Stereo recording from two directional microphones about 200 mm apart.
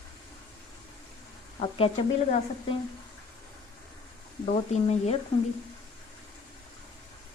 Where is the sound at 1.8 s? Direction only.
30° left (ahead or behind).